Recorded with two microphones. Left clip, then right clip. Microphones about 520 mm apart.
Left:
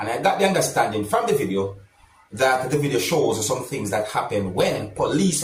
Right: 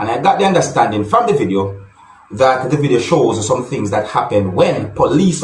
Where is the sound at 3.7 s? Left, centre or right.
Left.